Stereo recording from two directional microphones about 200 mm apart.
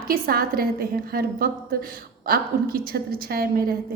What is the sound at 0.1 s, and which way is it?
A woman's voice, 50° right (ahead or behind).